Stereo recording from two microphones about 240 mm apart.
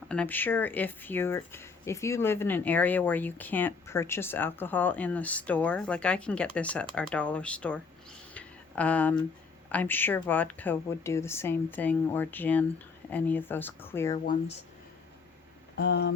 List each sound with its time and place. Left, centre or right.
0.1 s speech: centre
8.3 s a sound: centre
9.7 s speech: centre
15.8 s speech: left